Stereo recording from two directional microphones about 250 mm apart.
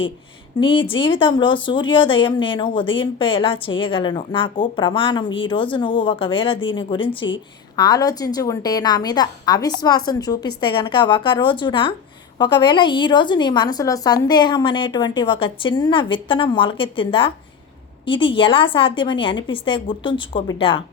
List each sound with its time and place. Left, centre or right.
0.6 s a woman's voice: left